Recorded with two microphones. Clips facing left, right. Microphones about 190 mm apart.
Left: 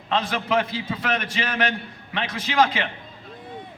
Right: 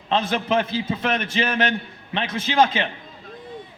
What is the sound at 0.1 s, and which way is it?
A man's voice, 25° right (ahead or behind).